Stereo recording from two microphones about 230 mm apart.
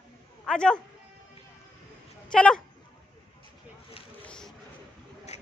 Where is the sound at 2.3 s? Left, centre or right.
Centre.